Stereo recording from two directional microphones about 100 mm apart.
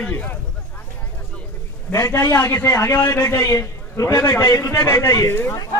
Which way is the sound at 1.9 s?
5° left (ahead or behind).